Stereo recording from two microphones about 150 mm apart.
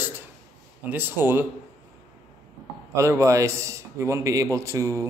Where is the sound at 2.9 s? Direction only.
20° right (ahead or behind).